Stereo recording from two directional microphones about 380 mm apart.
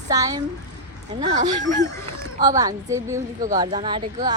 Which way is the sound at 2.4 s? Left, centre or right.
Centre.